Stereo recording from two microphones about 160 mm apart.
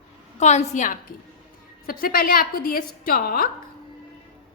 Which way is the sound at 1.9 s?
65° left (ahead or behind).